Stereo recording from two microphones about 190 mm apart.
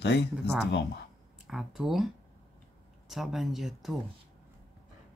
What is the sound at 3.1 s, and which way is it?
Speech, centre (ahead or behind).